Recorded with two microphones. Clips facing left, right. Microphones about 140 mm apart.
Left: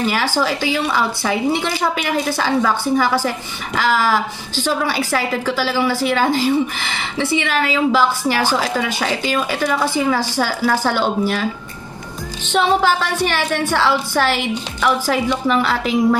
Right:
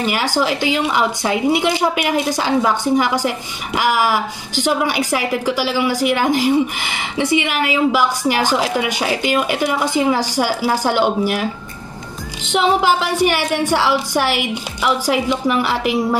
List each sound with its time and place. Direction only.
0.0 s a woman's voice: 15° right (ahead or behind)
12.4 s a woman's voice: 15° right (ahead or behind)